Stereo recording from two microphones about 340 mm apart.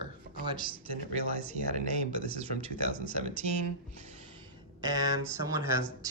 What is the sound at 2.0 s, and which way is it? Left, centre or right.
Speech, left.